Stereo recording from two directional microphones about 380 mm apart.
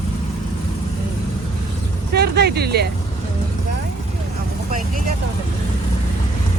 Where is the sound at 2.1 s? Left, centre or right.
Right.